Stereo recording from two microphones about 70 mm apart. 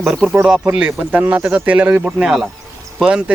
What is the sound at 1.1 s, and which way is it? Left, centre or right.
Speech, right.